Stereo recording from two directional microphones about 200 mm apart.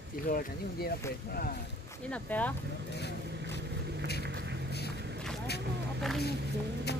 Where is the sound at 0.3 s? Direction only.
45° left (ahead or behind).